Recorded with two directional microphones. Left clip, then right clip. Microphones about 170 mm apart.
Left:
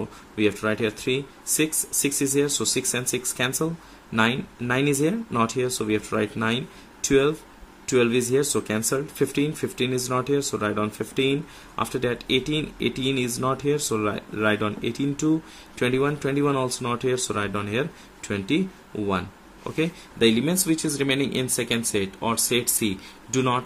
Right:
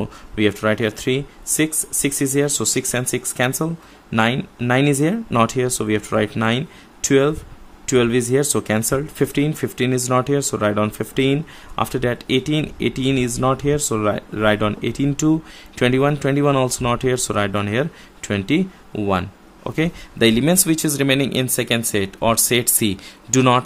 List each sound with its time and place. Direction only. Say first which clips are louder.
0.4 s speech: right 5 dB; 35° right (ahead or behind)